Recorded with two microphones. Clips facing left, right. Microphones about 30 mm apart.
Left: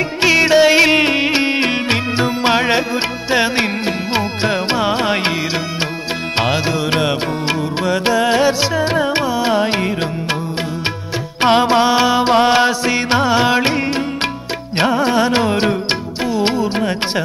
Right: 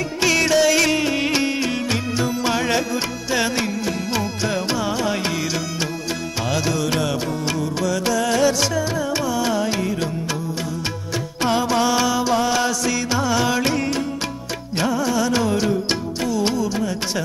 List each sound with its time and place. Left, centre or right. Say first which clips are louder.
0.2 s music: left 6 dB; left
6.4 s music: left 3 dB; left
11.4 s music: left 7 dB; left